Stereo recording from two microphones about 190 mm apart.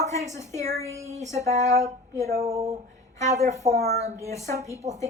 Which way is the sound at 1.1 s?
15° left (ahead or behind).